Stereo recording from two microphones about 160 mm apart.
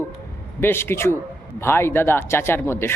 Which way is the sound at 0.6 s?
15° left (ahead or behind).